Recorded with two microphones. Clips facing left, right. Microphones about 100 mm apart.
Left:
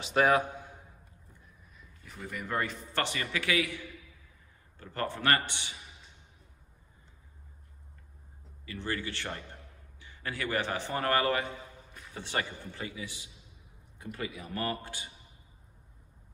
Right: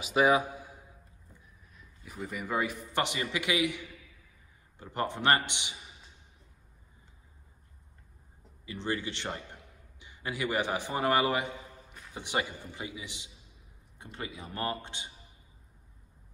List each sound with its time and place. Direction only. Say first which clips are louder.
0.0 s a man's voice: even; 5° right (ahead or behind)
1.8 s a man's voice: right 4 dB; 5° right (ahead or behind)
8.6 s a man's voice: right 2 dB; 20° right (ahead or behind)